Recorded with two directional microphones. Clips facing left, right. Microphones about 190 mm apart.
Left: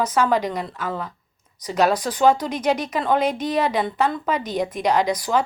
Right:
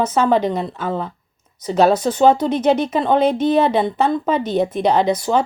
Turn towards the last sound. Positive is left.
turn(degrees=-25)  # may be behind; listen again after turning